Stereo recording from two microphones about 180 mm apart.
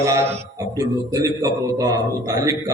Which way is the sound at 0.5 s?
20° right (ahead or behind).